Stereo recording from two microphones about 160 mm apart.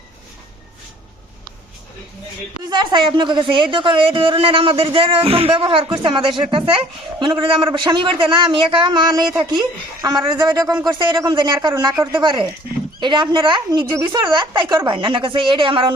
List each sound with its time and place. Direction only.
2.6 s speech: 30° right (ahead or behind)